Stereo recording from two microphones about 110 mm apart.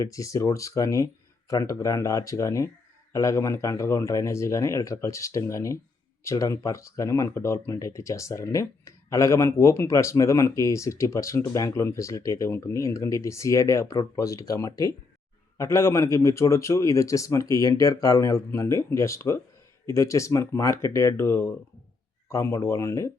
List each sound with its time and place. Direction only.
0.0 s speech: 30° left (ahead or behind)